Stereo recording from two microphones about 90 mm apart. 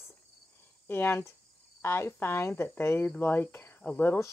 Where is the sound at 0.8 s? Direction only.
25° left (ahead or behind).